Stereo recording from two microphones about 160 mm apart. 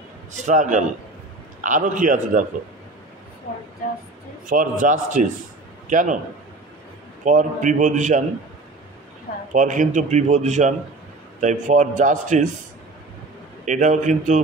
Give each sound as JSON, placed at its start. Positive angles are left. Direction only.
{"t": 0.3, "sound": "a man's voice", "side_deg": -50}
{"t": 4.5, "sound": "a man's voice", "side_deg": -55}
{"t": 7.2, "sound": "a man's voice", "side_deg": -50}
{"t": 9.5, "sound": "a man's voice", "side_deg": -50}
{"t": 13.7, "sound": "a man's voice", "side_deg": -50}